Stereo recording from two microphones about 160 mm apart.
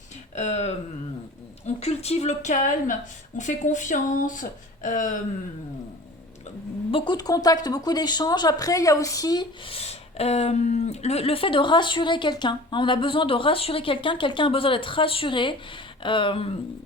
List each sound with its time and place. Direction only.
0.3 s a woman's voice: 45° left (ahead or behind)
6.9 s speech: 30° left (ahead or behind)